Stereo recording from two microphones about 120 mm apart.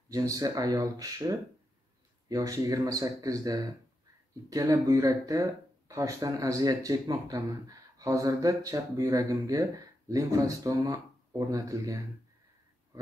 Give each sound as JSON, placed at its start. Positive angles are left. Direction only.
{"t": 0.1, "sound": "speech", "side_deg": -30}